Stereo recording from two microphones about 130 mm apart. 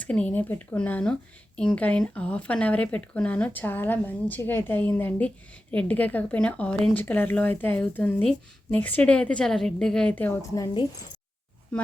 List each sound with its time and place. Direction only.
0.0 s speech: 10° left (ahead or behind)
10.5 s speech: 30° left (ahead or behind)
11.7 s speech: 10° left (ahead or behind)